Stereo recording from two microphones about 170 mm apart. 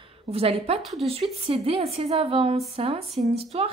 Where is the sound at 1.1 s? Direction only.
35° right (ahead or behind).